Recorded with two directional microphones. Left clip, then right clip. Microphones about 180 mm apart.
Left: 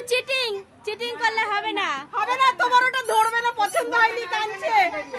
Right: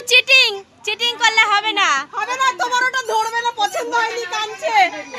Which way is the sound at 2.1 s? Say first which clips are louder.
Right 1 dB; 40° right (ahead or behind).